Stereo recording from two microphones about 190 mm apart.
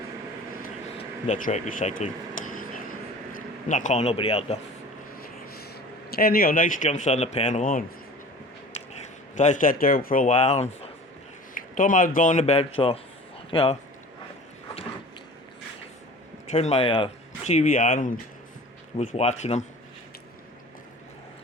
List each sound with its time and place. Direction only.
0.9 s a sound: 40° left (ahead or behind)
3.3 s a man's voice: 40° left (ahead or behind)
6.1 s speech: 50° left (ahead or behind); by 13.7 s 30° left (ahead or behind)
16.5 s speech: 35° left (ahead or behind)